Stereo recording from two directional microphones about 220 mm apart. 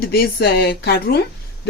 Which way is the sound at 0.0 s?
45° left (ahead or behind).